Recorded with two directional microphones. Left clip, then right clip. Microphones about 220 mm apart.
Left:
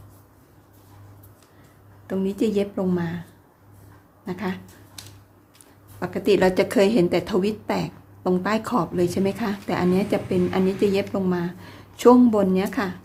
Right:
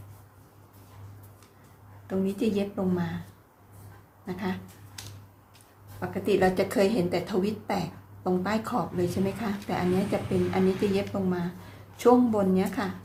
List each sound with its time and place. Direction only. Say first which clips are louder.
2.0 s a woman's voice: left 4 dB; 35° left (ahead or behind)
4.3 s a woman's voice: left 4 dB; 35° left (ahead or behind)
6.0 s a woman's voice: left 5 dB; 45° left (ahead or behind)